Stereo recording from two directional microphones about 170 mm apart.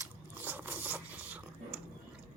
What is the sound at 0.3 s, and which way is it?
Zipper, 10° right (ahead or behind).